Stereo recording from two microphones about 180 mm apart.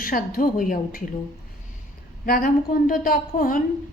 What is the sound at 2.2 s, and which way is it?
A woman's voice, 50° left (ahead or behind).